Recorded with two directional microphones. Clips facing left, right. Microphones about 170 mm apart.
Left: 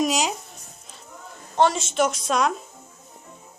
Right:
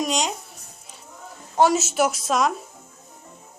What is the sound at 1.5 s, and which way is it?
Speech, 10° right (ahead or behind).